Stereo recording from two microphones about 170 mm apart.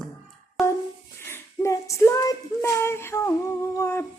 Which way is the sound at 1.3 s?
15° left (ahead or behind).